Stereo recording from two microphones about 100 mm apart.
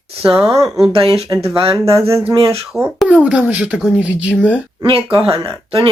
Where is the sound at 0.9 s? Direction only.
70° right (ahead or behind).